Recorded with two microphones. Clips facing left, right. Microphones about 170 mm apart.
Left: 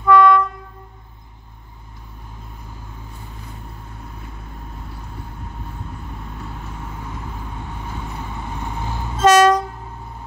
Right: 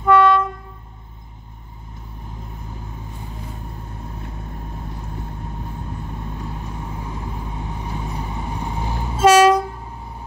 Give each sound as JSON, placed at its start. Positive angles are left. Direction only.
{"t": 0.0, "sound": "train", "side_deg": -25}
{"t": 6.3, "sound": "vehicle", "side_deg": -15}